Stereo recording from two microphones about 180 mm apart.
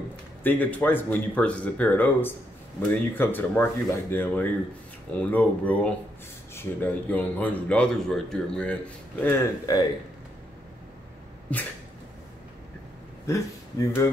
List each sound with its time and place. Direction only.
0.4 s speech: 10° left (ahead or behind)
9.2 s speech: 15° left (ahead or behind)
13.3 s speech: 15° left (ahead or behind)